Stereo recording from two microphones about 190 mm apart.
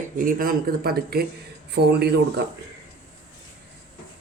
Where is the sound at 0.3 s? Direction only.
50° right (ahead or behind).